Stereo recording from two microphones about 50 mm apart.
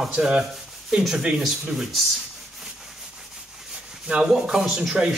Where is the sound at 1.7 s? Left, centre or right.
Centre.